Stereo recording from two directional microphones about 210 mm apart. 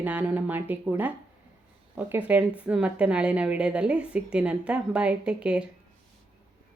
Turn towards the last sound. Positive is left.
turn(degrees=-5)  # may be behind; listen again after turning